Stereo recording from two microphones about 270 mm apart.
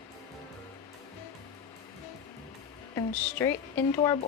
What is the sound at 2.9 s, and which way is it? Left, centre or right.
A woman's voice, centre.